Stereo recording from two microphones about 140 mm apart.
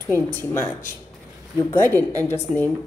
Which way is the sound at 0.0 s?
15° left (ahead or behind).